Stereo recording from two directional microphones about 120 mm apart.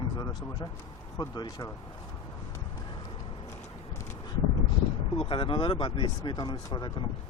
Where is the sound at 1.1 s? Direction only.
25° left (ahead or behind).